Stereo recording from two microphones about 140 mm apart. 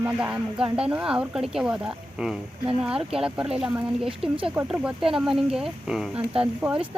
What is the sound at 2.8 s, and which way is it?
Speech, 5° right (ahead or behind).